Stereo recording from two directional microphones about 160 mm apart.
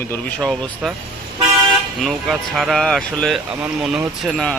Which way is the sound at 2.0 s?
Centre (ahead or behind).